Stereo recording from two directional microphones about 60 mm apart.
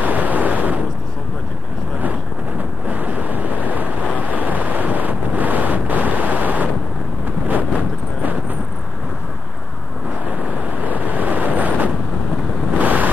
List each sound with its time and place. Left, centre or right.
0.0 s waves: right
2.9 s waves: right
4.2 s wind noise: right
10.8 s vehicle: right
12.7 s waves: right